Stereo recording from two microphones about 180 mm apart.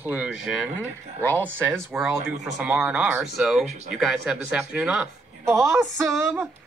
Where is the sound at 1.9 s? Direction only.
5° right (ahead or behind).